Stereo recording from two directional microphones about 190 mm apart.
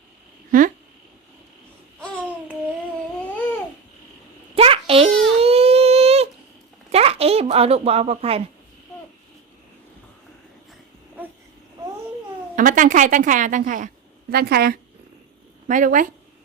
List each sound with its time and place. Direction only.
4.5 s babbling: 30° right (ahead or behind)
6.9 s speech: 30° right (ahead or behind)
12.5 s a woman's voice: 45° right (ahead or behind)
15.6 s a woman's voice: 45° right (ahead or behind)